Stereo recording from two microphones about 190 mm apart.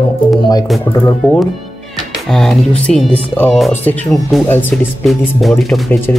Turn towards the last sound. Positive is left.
turn(degrees=0)  # may be behind; listen again after turning